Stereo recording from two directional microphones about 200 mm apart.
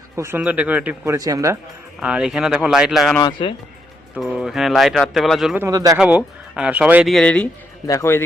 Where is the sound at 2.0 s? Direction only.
5° right (ahead or behind).